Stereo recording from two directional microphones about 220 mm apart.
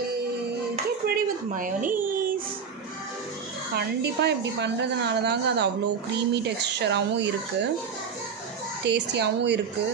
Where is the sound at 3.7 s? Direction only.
50° right (ahead or behind).